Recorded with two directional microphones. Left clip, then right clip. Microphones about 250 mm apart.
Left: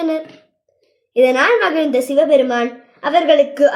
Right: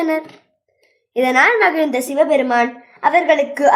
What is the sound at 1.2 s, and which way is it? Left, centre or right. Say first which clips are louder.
A woman's voice: even; right.